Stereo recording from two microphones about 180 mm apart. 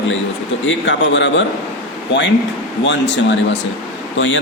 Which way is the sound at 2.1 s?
75° left (ahead or behind).